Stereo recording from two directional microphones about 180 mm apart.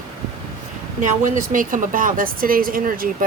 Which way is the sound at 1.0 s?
45° right (ahead or behind).